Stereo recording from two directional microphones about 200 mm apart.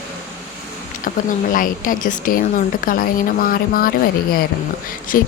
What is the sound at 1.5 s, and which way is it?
Speech, 45° left (ahead or behind).